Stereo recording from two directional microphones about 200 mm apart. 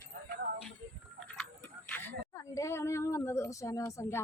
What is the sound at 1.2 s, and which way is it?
Tick-tock, 5° left (ahead or behind).